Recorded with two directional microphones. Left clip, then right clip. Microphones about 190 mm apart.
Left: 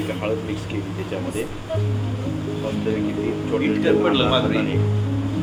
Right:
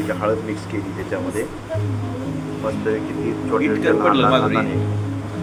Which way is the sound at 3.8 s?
30° right (ahead or behind).